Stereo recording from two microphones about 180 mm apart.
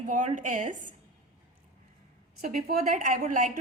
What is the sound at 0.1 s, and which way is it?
Speech, 45° right (ahead or behind).